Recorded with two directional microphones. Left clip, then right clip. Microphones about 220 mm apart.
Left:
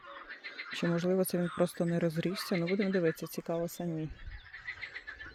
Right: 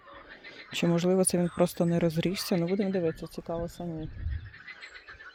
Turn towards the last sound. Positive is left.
turn(degrees=20)  # may be behind; listen again after turning